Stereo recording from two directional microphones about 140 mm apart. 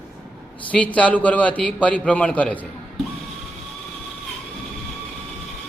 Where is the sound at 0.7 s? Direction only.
10° left (ahead or behind).